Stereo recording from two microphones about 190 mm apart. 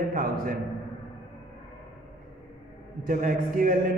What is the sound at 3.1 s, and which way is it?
Speech, 45° right (ahead or behind).